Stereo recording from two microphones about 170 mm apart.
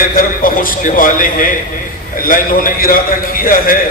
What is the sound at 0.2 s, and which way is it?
A man's voice, 55° left (ahead or behind).